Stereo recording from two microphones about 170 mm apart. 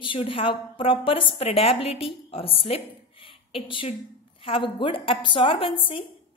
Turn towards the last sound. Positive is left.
turn(degrees=30)  # may be behind; listen again after turning